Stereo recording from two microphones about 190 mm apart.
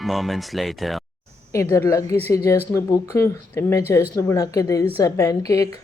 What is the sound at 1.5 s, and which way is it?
Speech, 15° left (ahead or behind).